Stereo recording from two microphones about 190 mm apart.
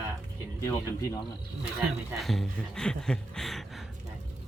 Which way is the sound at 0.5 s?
15° left (ahead or behind).